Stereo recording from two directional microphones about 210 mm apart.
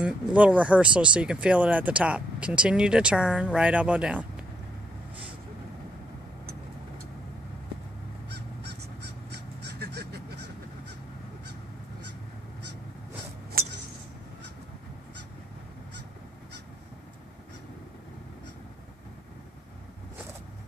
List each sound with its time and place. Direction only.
0.0 s speech: 5° right (ahead or behind)
9.3 s honk: 50° right (ahead or behind)